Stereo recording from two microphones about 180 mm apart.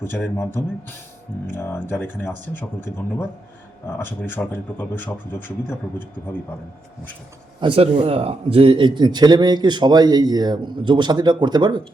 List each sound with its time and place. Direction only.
1.5 s a man's voice: 15° left (ahead or behind)
7.6 s a man's voice: 30° right (ahead or behind)